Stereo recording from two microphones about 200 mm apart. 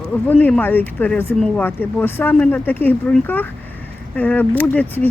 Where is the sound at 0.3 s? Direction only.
10° left (ahead or behind).